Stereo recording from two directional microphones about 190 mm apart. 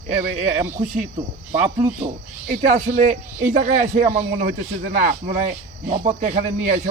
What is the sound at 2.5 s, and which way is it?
Speech, 40° right (ahead or behind).